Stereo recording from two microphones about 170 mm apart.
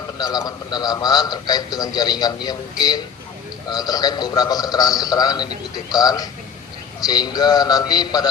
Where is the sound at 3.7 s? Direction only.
25° left (ahead or behind).